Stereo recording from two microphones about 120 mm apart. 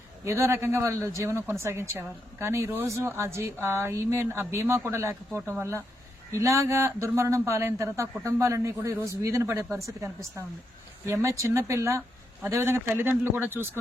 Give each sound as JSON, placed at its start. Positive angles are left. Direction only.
{"t": 0.3, "sound": "a man's voice", "side_deg": -20}